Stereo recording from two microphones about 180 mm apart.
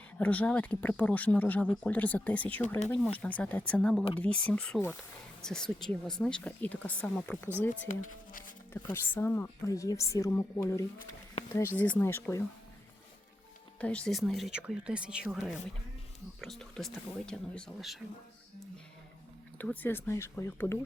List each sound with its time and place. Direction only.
0.2 s a woman's voice: 10° left (ahead or behind)
7.9 s speech: 50° left (ahead or behind)
8.7 s a woman's voice: 15° left (ahead or behind)
13.7 s speech: 5° left (ahead or behind)
19.5 s a woman's voice: 10° left (ahead or behind)